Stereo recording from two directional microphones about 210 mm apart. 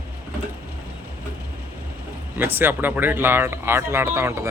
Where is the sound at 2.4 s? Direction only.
10° right (ahead or behind).